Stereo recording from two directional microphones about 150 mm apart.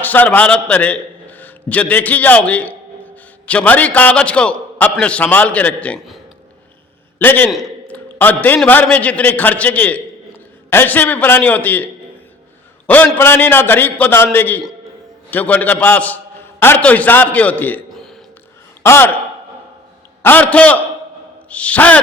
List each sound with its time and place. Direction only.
0.0 s a man's voice: 10° left (ahead or behind)
7.2 s a man's voice: 10° left (ahead or behind)
12.9 s a man's voice: 10° left (ahead or behind)
20.2 s a man's voice: 10° left (ahead or behind)